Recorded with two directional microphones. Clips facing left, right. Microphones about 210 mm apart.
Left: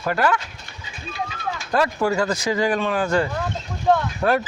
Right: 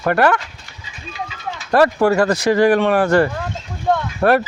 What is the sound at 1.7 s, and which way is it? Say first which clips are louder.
Speech: right 7 dB; 65° right (ahead or behind).